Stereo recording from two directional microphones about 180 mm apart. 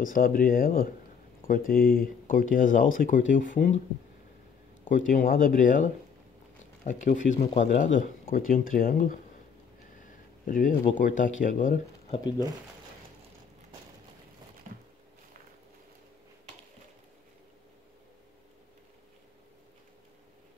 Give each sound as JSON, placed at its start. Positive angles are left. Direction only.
{"t": 0.0, "sound": "speech", "side_deg": 50}
{"t": 4.8, "sound": "speech", "side_deg": 45}
{"t": 6.9, "sound": "speech", "side_deg": 45}
{"t": 10.4, "sound": "speech", "side_deg": 50}
{"t": 14.7, "sound": "a sound", "side_deg": -45}